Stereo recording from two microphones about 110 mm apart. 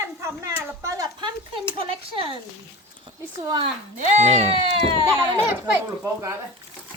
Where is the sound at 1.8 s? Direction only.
55° right (ahead or behind).